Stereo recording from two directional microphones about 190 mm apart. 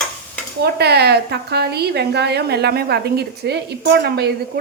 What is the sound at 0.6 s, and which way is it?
A woman's voice, 60° right (ahead or behind).